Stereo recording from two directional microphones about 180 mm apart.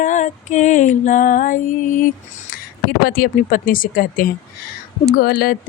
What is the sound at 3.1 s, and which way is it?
Music, 55° left (ahead or behind).